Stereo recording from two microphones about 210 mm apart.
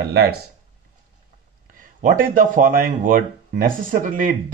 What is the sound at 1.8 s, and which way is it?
Speech, 40° right (ahead or behind).